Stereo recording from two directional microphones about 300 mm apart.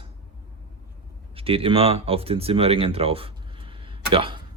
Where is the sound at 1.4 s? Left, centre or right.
Centre.